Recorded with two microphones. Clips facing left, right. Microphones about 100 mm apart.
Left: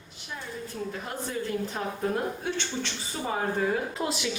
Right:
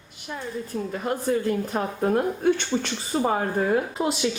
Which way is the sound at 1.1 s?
50° right (ahead or behind).